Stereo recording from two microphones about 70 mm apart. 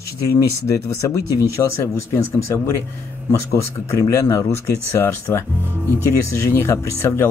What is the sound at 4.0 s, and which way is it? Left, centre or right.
Speech, left.